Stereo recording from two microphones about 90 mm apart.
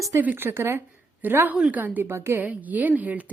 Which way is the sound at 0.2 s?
20° right (ahead or behind).